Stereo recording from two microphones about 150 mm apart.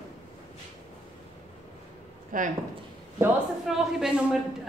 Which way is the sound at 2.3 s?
65° right (ahead or behind).